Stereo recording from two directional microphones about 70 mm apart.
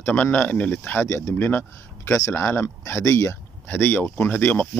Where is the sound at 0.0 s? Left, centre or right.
Left.